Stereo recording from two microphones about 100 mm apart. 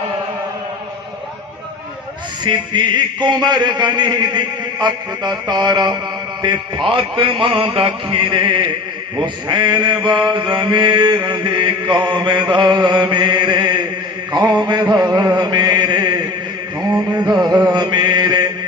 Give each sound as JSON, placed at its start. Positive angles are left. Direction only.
{"t": 2.4, "sound": "a man's voice", "side_deg": -45}
{"t": 6.9, "sound": "chant", "side_deg": -60}
{"t": 9.1, "sound": "a man's voice", "side_deg": -50}
{"t": 15.4, "sound": "chant", "side_deg": -45}
{"t": 17.2, "sound": "a man's voice", "side_deg": -45}
{"t": 17.7, "sound": "mantra", "side_deg": -45}